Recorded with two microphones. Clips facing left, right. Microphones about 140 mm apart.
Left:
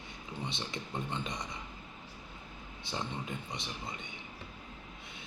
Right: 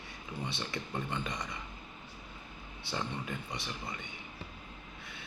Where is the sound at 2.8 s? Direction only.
20° left (ahead or behind).